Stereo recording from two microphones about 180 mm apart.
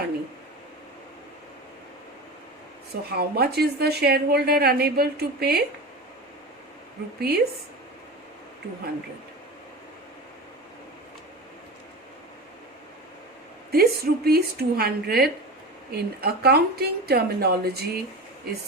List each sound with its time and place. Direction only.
2.9 s a woman's voice: 60° right (ahead or behind)
7.2 s a woman's voice: 60° right (ahead or behind)
13.7 s a woman's voice: 60° right (ahead or behind)